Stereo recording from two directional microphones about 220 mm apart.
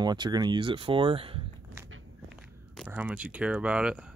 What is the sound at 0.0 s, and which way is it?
Speech, 20° right (ahead or behind).